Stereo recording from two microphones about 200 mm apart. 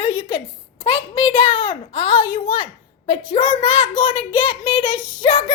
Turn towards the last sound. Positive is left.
turn(degrees=25)  # may be behind; listen again after turning